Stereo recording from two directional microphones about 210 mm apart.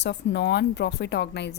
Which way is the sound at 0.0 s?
55° left (ahead or behind).